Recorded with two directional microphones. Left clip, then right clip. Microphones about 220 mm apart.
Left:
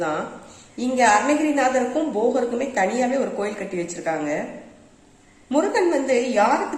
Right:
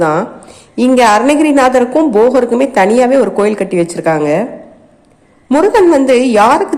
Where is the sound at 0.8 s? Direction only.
40° right (ahead or behind).